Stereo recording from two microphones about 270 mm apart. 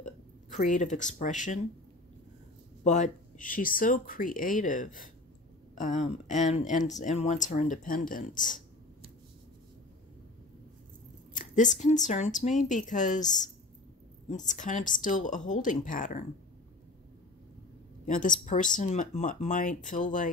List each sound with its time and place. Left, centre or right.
0.0 s speech: left
2.8 s speech: left
11.3 s speech: left
18.0 s speech: left